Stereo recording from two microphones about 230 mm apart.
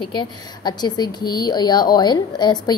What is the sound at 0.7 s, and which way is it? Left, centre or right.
A woman's voice, centre.